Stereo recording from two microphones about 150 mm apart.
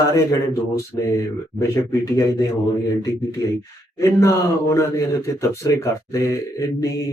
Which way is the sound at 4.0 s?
20° left (ahead or behind).